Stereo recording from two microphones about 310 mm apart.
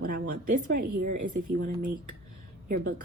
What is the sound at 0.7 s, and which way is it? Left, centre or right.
Speech, right.